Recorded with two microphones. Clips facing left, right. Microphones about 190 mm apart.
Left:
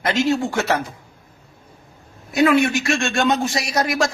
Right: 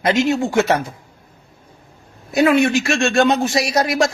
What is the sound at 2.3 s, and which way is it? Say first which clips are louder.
Speech: right 2 dB; 25° right (ahead or behind).